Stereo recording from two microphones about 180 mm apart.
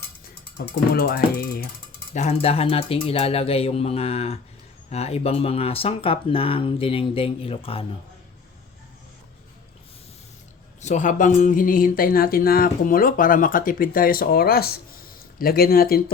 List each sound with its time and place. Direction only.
0.6 s speech: 60° left (ahead or behind)
2.1 s speech: 35° left (ahead or behind)
10.8 s speech: 40° left (ahead or behind); by 16.0 s 55° left (ahead or behind)